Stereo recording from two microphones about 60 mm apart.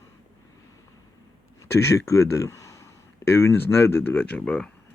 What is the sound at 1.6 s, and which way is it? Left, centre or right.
Speech, left.